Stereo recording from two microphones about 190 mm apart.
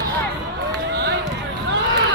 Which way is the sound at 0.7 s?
60° right (ahead or behind).